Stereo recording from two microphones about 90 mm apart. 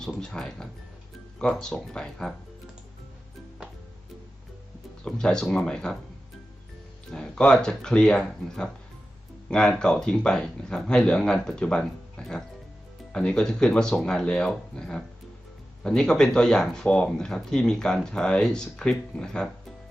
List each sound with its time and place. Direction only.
0.0 s speech: 10° left (ahead or behind)
5.0 s speech: 10° left (ahead or behind)
7.1 s speech: 10° left (ahead or behind)